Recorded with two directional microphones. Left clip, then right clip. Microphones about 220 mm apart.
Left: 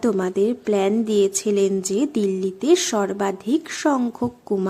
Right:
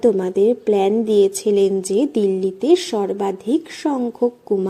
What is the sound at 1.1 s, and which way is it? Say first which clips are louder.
Speech: right 5 dB; 35° left (ahead or behind).